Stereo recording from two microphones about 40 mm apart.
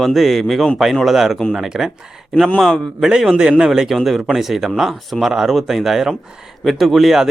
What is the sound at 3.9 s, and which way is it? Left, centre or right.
Speech, centre.